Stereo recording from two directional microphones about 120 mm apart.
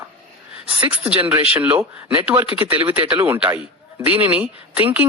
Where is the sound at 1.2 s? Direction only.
15° right (ahead or behind).